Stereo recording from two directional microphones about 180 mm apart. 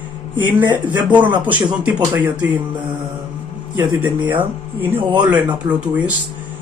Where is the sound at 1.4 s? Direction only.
5° right (ahead or behind).